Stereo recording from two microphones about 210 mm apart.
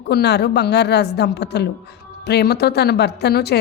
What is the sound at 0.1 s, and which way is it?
A woman's voice, 50° left (ahead or behind).